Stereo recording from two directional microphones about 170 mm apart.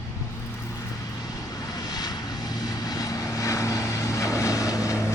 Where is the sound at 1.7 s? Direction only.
20° left (ahead or behind).